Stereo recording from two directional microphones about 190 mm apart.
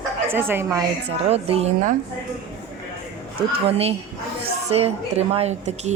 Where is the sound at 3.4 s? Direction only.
30° right (ahead or behind).